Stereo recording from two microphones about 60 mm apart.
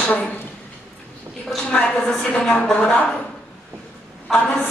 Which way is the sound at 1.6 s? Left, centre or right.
Centre.